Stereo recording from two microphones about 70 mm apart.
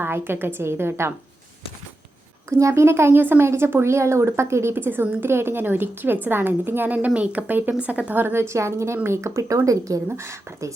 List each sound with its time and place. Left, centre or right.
0.0 s a woman's voice: right
2.5 s a woman's voice: right
10.1 s a woman's voice: right